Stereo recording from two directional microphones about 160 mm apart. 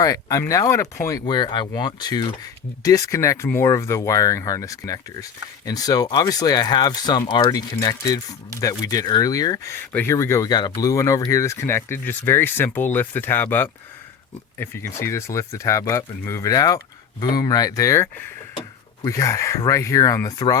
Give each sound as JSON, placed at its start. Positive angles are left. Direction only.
{"t": 0.0, "sound": "speech", "side_deg": 20}